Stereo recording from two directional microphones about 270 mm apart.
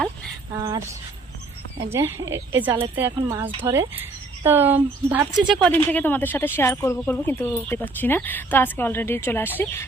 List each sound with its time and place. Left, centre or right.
0.6 s a woman's voice: centre